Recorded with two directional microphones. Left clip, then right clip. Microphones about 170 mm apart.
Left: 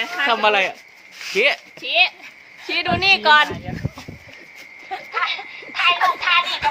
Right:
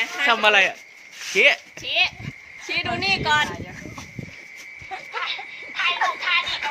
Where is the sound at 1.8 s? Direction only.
40° left (ahead or behind).